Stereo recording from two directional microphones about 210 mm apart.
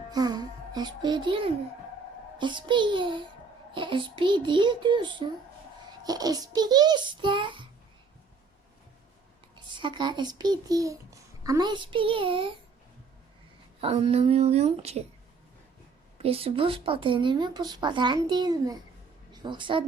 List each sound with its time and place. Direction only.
0.1 s a child's voice: 20° right (ahead or behind)
9.6 s a child's voice: 20° right (ahead or behind)
13.8 s a child's voice: 30° right (ahead or behind)
16.1 s a child's voice: 30° right (ahead or behind)